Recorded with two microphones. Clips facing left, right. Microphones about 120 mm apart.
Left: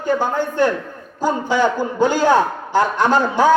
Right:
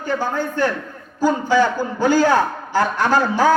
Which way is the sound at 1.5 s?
20° left (ahead or behind).